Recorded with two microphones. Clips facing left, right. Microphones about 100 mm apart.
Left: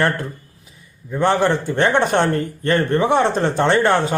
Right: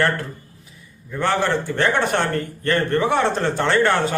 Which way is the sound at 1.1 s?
20° left (ahead or behind).